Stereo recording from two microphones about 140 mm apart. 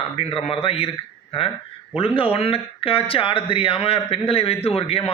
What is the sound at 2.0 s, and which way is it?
A man's voice, 40° left (ahead or behind).